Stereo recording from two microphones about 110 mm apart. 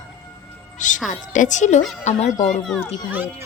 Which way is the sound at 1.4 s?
90° left.